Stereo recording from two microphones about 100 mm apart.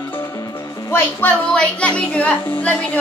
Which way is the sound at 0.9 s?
15° left (ahead or behind).